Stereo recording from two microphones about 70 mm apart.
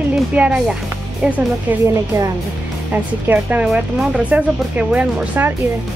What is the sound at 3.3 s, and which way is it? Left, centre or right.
Music, right.